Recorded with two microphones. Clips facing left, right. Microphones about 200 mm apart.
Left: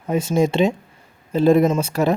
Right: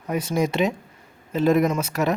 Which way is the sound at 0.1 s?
25° left (ahead or behind).